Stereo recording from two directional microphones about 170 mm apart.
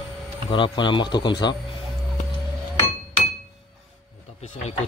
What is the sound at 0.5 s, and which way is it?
Speech, 30° left (ahead or behind).